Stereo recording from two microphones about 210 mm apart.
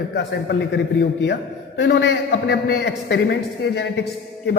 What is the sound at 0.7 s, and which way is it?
A man's voice, 55° left (ahead or behind).